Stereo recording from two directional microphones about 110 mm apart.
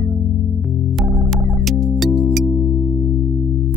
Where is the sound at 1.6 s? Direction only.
Centre (ahead or behind).